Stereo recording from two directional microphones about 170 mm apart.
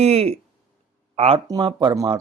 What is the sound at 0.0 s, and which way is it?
Speech, 35° right (ahead or behind).